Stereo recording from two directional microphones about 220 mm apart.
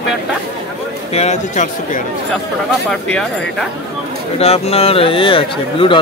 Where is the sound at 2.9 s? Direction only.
5° left (ahead or behind).